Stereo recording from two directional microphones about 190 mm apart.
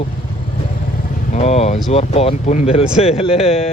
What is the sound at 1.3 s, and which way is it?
Speech, 35° left (ahead or behind).